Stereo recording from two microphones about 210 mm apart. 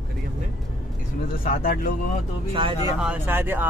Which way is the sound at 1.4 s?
45° left (ahead or behind).